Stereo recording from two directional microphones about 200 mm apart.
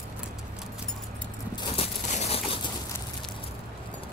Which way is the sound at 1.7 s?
30° left (ahead or behind).